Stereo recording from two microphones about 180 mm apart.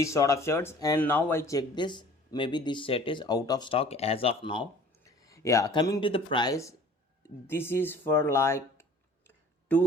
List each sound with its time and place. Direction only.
0.0 s speech: 15° left (ahead or behind)